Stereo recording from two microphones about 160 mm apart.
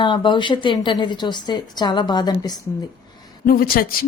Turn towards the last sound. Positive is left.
turn(degrees=70)  # may be behind; listen again after turning